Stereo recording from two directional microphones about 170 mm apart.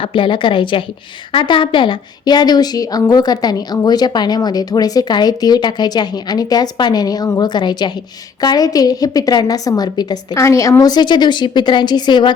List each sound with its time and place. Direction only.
0.0 s a woman's voice: 30° left (ahead or behind)